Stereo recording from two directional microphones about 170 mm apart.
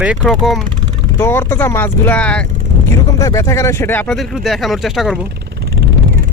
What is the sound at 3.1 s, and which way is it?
Speech, 20° left (ahead or behind).